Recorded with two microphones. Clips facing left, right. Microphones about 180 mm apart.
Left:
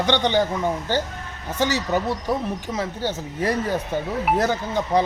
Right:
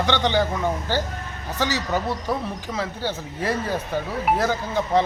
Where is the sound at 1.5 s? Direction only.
20° left (ahead or behind).